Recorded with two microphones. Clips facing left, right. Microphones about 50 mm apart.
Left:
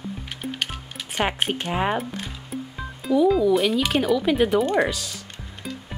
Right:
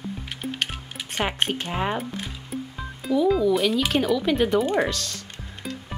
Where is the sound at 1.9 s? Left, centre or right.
Centre.